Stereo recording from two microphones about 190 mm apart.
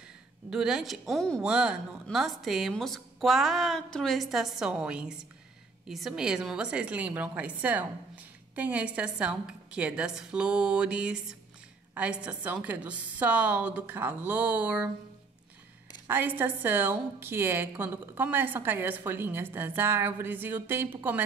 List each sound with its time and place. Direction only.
0.5 s a woman's voice: 5° right (ahead or behind)
16.1 s a woman's voice: 10° right (ahead or behind)